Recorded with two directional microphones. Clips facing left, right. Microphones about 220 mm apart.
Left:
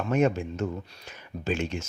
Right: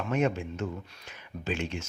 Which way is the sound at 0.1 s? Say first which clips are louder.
Left 4 dB; 45° left (ahead or behind).